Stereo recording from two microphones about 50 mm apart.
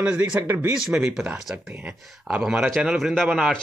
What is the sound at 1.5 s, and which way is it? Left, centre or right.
Speech, right.